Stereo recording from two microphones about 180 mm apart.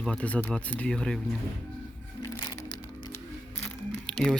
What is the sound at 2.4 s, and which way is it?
Music, 25° left (ahead or behind).